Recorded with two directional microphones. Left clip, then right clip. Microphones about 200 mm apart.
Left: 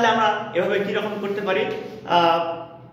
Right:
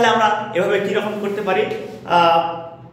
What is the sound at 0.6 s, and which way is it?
Speech, 20° right (ahead or behind).